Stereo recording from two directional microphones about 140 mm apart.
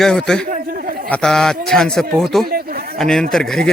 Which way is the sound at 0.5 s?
80° right.